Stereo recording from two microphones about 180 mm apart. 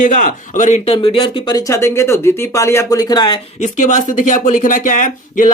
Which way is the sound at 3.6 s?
45° left (ahead or behind).